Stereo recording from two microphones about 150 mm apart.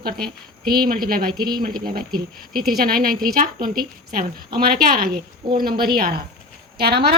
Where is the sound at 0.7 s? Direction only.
85° right.